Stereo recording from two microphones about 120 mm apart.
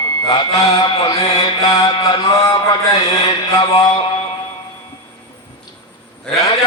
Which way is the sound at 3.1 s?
40° left (ahead or behind).